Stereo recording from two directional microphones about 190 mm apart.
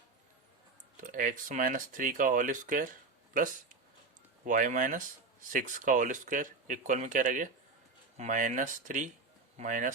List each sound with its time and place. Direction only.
1.0 s speech: 45° right (ahead or behind)